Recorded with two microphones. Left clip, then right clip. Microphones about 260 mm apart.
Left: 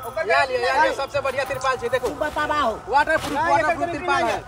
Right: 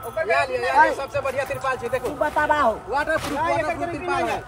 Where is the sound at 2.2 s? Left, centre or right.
Centre.